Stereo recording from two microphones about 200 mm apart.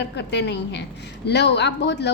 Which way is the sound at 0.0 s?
60° left (ahead or behind).